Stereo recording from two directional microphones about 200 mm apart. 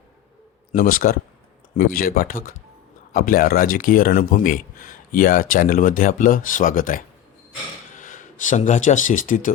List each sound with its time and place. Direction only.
0.7 s speech: 45° left (ahead or behind)